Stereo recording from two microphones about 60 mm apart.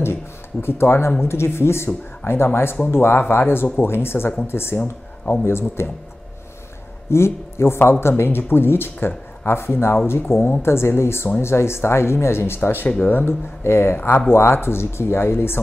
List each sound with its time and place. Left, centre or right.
0.0 s a sound: left
1.2 s speech: left
4.7 s speech: left
5.4 s speech: left
7.1 s speech: left